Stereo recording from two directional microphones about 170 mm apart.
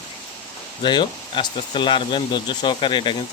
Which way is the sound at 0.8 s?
25° left (ahead or behind).